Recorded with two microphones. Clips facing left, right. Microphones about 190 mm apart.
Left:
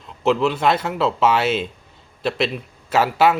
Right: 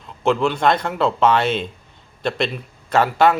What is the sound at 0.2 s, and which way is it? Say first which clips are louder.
Speech: even; centre (ahead or behind).